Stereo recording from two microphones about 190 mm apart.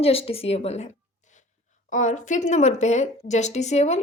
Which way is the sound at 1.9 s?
40° left (ahead or behind).